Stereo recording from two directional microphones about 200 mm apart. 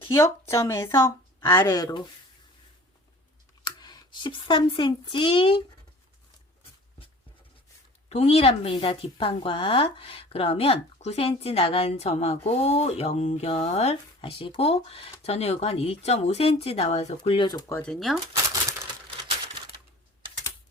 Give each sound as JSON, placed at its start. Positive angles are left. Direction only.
{"t": 0.0, "sound": "speech", "side_deg": 15}
{"t": 3.6, "sound": "speech", "side_deg": 20}
{"t": 8.1, "sound": "speech", "side_deg": 30}
{"t": 17.7, "sound": "speech", "side_deg": 0}